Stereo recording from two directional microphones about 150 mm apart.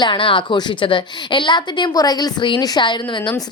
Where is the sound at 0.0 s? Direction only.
35° left (ahead or behind).